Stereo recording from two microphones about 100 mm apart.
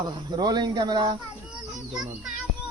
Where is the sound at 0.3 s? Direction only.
45° right (ahead or behind).